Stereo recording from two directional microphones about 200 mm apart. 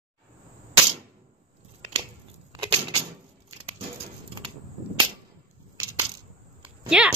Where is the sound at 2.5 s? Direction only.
20° right (ahead or behind).